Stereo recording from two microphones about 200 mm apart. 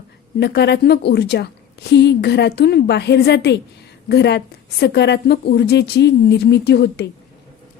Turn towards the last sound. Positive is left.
turn(degrees=55)  # may be behind; listen again after turning